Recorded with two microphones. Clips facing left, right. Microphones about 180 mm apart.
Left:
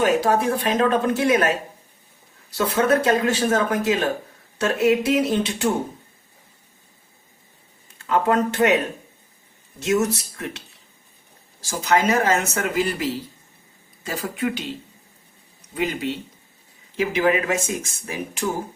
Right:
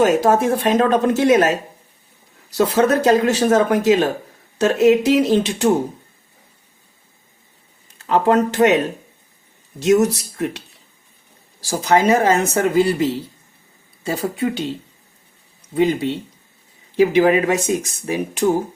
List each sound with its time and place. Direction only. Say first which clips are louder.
0.0 s speech: right 4 dB; 45° right (ahead or behind)
2.5 s speech: right 4 dB; 40° right (ahead or behind)
7.9 s speech: right 4 dB; 40° right (ahead or behind)
9.8 s speech: right 6 dB; 40° right (ahead or behind)
11.6 s speech: right 4 dB; 35° right (ahead or behind)
15.7 s speech: right 7 dB; 30° right (ahead or behind)
17.0 s speech: right 7 dB; 40° right (ahead or behind)